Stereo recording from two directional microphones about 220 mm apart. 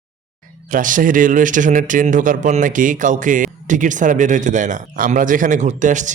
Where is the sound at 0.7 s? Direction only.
35° right (ahead or behind).